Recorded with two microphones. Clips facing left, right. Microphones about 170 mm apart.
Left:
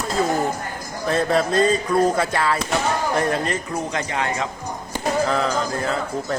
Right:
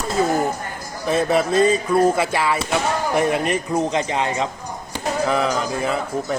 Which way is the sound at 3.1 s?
15° right (ahead or behind).